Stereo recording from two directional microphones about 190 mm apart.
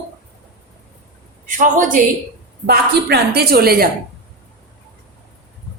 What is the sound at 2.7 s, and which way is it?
A woman's voice, 55° right (ahead or behind).